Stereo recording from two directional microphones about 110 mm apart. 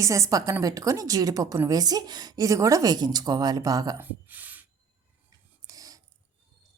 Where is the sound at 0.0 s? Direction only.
30° right (ahead or behind).